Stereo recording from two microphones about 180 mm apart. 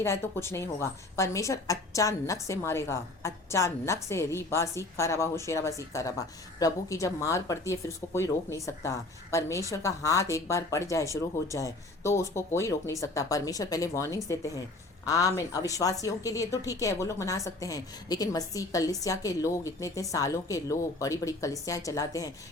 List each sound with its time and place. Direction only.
0.0 s a woman's voice: 15° left (ahead or behind)